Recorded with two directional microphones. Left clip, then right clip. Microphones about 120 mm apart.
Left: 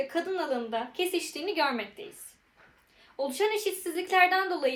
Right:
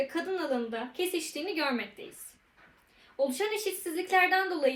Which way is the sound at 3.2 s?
20° left (ahead or behind).